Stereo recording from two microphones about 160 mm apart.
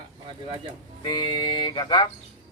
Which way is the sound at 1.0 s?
25° left (ahead or behind).